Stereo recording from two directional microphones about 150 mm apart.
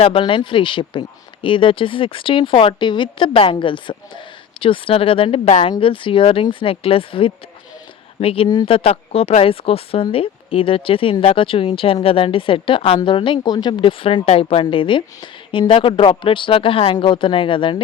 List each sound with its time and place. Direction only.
0.0 s speech: 35° left (ahead or behind)